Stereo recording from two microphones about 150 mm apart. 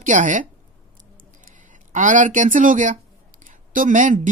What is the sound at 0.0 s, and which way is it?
Speech, 60° right (ahead or behind).